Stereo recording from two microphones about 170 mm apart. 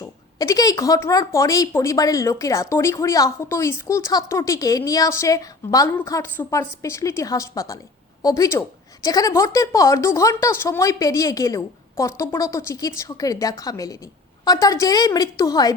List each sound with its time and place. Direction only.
0.0 s a woman's voice: 20° left (ahead or behind)